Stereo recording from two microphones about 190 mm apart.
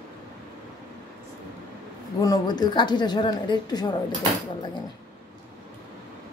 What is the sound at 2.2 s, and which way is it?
A woman's voice, 20° left (ahead or behind).